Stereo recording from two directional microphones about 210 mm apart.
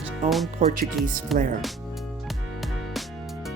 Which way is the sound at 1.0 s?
Centre (ahead or behind).